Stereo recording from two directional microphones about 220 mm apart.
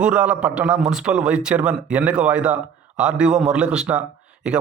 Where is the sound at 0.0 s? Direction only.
5° right (ahead or behind).